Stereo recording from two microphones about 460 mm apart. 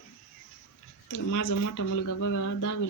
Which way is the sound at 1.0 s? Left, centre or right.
Left.